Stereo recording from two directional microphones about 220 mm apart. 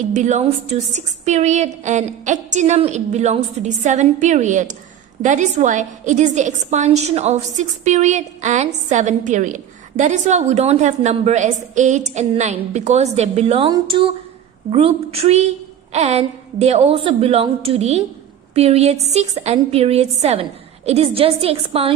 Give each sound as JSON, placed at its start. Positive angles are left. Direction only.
{"t": 0.1, "sound": "a woman's voice", "side_deg": -30}